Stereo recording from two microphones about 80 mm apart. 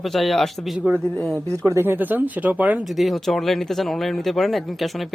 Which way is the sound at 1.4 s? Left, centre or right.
Right.